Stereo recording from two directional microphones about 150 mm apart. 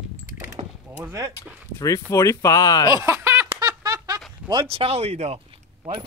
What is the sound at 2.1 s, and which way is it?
Speech, 20° left (ahead or behind).